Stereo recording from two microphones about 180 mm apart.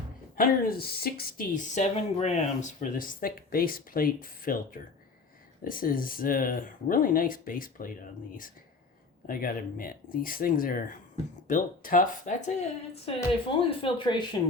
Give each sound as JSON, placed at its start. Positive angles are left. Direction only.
{"t": 0.3, "sound": "speech", "side_deg": 50}
{"t": 9.2, "sound": "speech", "side_deg": 50}